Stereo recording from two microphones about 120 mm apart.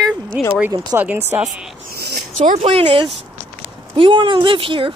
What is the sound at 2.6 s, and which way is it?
Speech, 50° right (ahead or behind).